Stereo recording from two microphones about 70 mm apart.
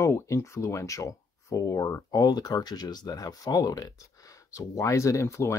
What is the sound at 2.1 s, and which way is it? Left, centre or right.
Speech, left.